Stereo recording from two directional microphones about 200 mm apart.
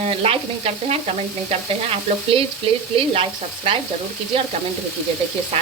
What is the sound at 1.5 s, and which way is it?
Speech, 30° right (ahead or behind).